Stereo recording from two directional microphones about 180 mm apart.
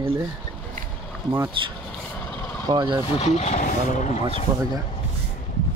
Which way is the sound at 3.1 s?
35° left (ahead or behind).